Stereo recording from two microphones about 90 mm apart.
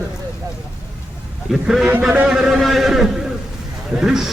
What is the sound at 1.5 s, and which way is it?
A man's voice, 5° right (ahead or behind).